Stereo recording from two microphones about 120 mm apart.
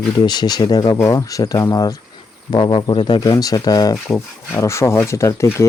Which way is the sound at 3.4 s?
30° left (ahead or behind).